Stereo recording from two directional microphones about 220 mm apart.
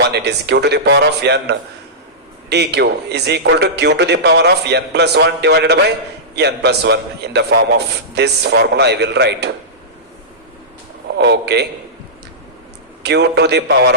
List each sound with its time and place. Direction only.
0.0 s a man's voice: 50° right (ahead or behind)
11.2 s a man's voice: 50° right (ahead or behind)
13.0 s a man's voice: 50° right (ahead or behind)